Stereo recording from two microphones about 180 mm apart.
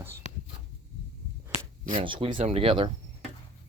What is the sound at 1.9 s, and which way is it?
Speech, 30° right (ahead or behind).